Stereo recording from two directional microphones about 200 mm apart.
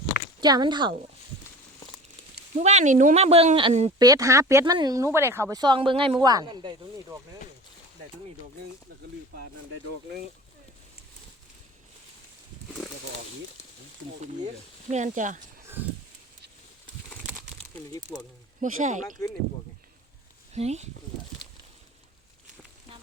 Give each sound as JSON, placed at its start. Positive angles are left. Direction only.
{"t": 0.4, "sound": "speech", "side_deg": -20}
{"t": 2.6, "sound": "speech", "side_deg": -35}
{"t": 3.9, "sound": "speech", "side_deg": -20}
{"t": 14.4, "sound": "speech", "side_deg": -35}
{"t": 18.6, "sound": "speech", "side_deg": -40}
{"t": 20.5, "sound": "speech", "side_deg": -35}